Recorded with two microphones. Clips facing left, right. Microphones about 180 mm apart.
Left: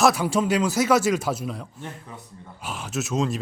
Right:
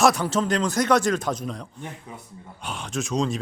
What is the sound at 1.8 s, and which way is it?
Speech, 10° right (ahead or behind).